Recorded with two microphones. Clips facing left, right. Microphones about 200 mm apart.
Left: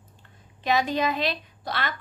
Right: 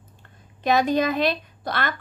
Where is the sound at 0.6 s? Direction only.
45° right (ahead or behind).